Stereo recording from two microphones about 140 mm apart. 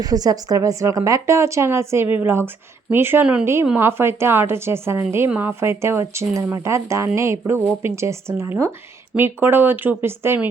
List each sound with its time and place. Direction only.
0.0 s speech: 25° right (ahead or behind)